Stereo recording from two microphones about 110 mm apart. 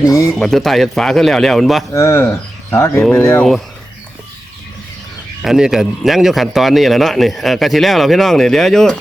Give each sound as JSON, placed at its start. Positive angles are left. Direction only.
{"t": 0.0, "sound": "a sound", "side_deg": 30}
{"t": 0.3, "sound": "a man's voice", "side_deg": 5}
{"t": 1.9, "sound": "speech", "side_deg": 25}
{"t": 5.4, "sound": "a man's voice", "side_deg": -5}